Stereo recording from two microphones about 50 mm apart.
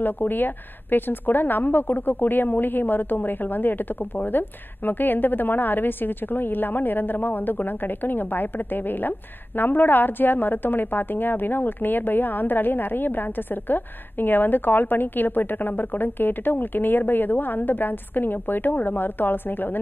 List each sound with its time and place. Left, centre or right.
0.0 s a woman's voice: left